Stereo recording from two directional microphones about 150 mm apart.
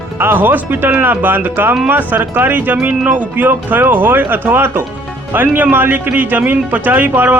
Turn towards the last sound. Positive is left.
turn(degrees=-10)  # may be behind; listen again after turning